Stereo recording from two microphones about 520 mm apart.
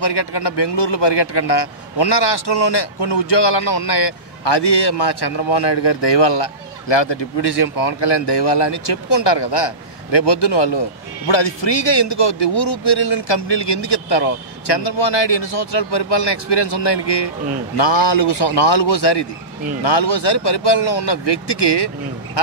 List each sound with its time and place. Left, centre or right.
0.0 s a man's voice: left